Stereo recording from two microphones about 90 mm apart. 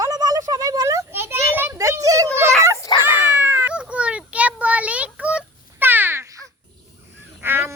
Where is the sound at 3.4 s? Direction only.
20° right (ahead or behind).